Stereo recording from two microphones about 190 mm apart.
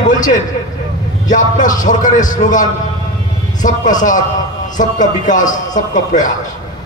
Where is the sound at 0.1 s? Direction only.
40° left (ahead or behind).